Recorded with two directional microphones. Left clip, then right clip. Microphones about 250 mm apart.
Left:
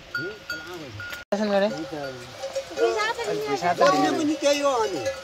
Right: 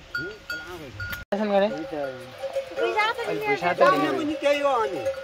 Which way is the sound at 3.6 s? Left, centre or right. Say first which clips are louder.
Even; right.